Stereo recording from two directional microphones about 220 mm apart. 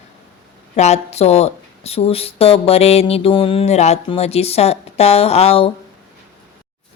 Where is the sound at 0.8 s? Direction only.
30° left (ahead or behind).